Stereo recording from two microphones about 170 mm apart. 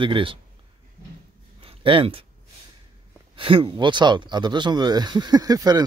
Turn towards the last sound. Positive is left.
turn(degrees=-20)  # may be behind; listen again after turning